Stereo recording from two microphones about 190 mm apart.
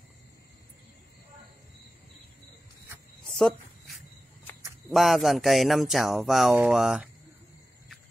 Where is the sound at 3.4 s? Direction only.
Centre (ahead or behind).